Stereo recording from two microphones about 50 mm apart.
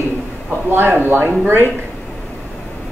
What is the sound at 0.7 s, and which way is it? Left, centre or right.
Speech, right.